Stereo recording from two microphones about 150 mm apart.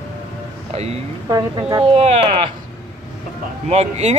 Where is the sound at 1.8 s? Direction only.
40° right (ahead or behind).